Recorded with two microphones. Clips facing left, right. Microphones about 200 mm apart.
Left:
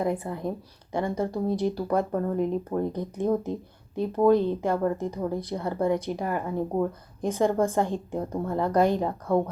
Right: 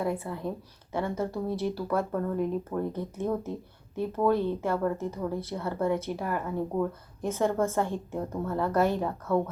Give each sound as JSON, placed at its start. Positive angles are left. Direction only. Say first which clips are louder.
{"t": 0.0, "sound": "speech", "louder": "left 3 dB", "side_deg": 15}